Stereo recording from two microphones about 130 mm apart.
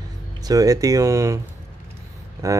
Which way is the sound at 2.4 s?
25° right (ahead or behind).